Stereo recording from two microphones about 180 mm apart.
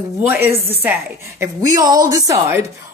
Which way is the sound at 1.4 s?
20° right (ahead or behind).